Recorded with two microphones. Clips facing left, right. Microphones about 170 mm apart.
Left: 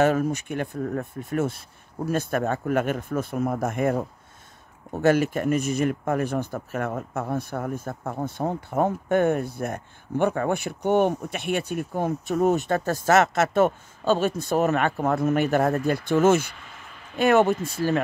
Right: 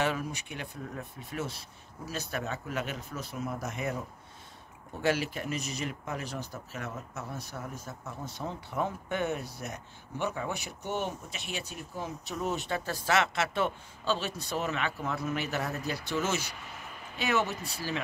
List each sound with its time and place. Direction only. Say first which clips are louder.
0.0 s speech: left 10 dB; 45° left (ahead or behind)